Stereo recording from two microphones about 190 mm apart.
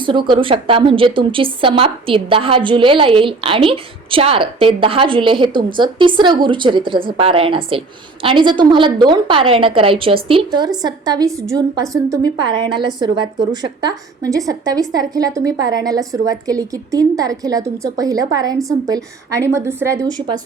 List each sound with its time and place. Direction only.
0.0 s a woman's voice: 25° right (ahead or behind)